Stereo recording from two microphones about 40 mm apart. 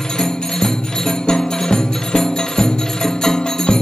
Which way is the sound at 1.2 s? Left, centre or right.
Centre.